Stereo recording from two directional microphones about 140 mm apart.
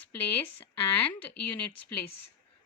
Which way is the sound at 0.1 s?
15° left (ahead or behind).